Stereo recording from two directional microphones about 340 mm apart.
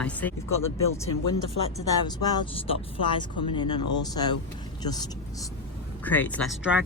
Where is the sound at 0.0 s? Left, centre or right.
Centre.